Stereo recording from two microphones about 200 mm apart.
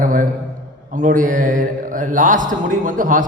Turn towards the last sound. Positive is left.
turn(degrees=-40)  # may be behind; listen again after turning